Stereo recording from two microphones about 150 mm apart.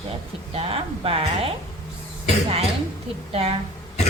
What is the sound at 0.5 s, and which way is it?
A woman's voice, 40° right (ahead or behind).